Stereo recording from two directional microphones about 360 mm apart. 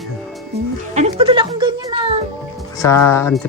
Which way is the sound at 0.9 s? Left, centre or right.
Centre.